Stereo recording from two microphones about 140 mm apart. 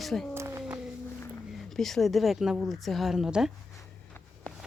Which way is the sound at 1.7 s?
Centre (ahead or behind).